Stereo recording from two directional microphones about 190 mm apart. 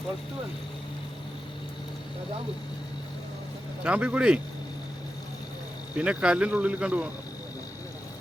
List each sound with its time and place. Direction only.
3.8 s speech: 5° right (ahead or behind)
6.0 s speech: 5° right (ahead or behind)